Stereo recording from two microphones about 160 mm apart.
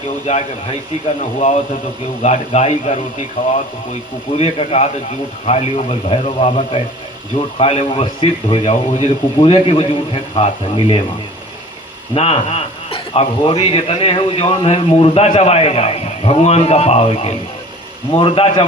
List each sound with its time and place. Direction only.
0.3 s a man's voice: 45° left (ahead or behind)
4.4 s speech: 40° left (ahead or behind)
12.1 s speech: 35° left (ahead or behind)